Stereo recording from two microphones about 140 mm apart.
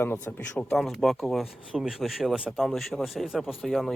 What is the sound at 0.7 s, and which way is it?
Speech, centre (ahead or behind).